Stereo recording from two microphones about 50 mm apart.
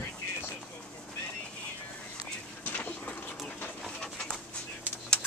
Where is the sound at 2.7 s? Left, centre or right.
Left.